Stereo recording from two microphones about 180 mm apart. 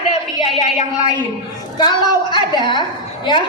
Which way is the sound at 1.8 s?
25° left (ahead or behind).